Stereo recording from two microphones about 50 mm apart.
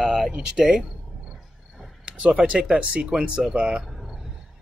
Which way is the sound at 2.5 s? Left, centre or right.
Centre.